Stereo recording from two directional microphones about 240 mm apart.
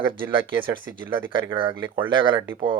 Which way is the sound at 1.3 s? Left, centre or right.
Right.